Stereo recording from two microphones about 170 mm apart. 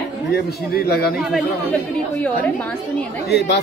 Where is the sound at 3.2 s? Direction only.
80° left.